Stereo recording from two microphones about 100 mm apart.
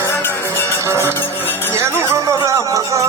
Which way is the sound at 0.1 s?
20° left (ahead or behind).